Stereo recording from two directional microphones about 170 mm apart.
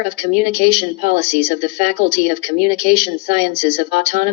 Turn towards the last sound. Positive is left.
turn(degrees=-45)  # may be behind; listen again after turning